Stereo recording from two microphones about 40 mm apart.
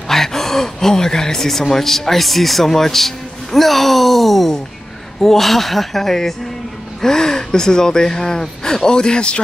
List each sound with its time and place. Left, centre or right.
0.1 s speech: centre